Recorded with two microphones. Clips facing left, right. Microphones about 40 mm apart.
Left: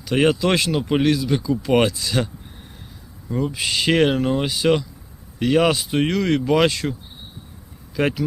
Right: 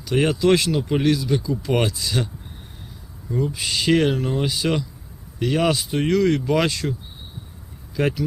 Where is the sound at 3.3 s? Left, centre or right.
Left.